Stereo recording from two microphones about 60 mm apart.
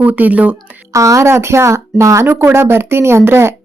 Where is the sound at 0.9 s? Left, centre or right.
Right.